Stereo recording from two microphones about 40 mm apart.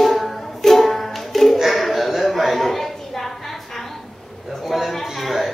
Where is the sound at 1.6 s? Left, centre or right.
Centre.